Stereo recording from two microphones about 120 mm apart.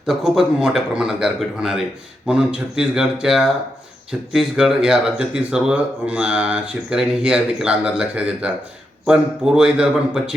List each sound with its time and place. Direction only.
0.0 s speech: 5° right (ahead or behind)